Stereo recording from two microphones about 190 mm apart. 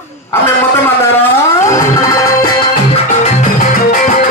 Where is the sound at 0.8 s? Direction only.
10° left (ahead or behind).